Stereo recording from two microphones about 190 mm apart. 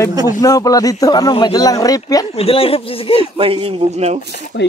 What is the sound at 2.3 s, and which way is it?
Speech, 30° left (ahead or behind).